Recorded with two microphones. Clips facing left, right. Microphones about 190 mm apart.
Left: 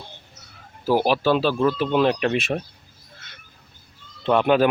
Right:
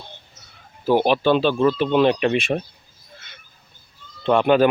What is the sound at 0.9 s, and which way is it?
Speech, 5° left (ahead or behind).